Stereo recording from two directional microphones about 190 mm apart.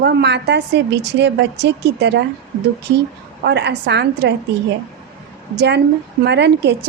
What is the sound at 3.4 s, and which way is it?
Speech, 60° right (ahead or behind).